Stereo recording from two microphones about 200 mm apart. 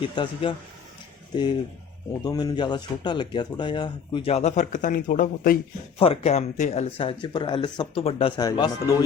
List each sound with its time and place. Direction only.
0.0 s speech: 25° left (ahead or behind)
2.2 s speech: 20° left (ahead or behind); by 5.5 s 40° left (ahead or behind)
6.0 s speech: 30° left (ahead or behind)